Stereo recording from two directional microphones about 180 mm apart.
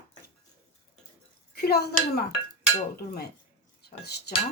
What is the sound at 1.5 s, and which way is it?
Speech, 60° left (ahead or behind).